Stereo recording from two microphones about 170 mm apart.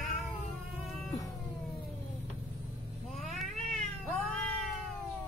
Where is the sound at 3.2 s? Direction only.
Centre (ahead or behind).